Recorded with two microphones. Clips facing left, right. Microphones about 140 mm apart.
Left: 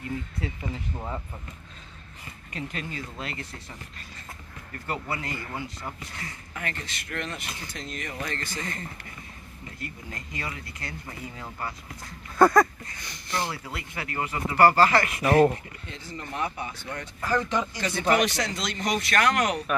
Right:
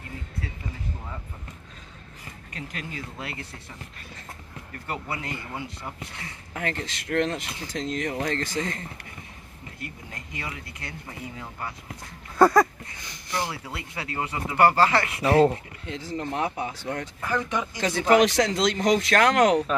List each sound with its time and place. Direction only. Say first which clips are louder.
2.5 s speech: left 2 dB; centre (ahead or behind)
3.2 s speech: even; 15° right (ahead or behind)
4.8 s speech: left 1 dB; 20° right (ahead or behind)
6.5 s speech: right 6 dB; 90° right
9.8 s speech: left 1 dB; 20° right (ahead or behind)
11.1 s speech: right 1 dB; 10° right (ahead or behind)
12.4 s speech: right 1 dB; 30° right (ahead or behind)
13.3 s speech: even; 15° right (ahead or behind)
15.9 s speech: right 7 dB; 90° right
17.2 s speech: left 3 dB; 15° right (ahead or behind)
17.7 s speech: right 6 dB; 90° right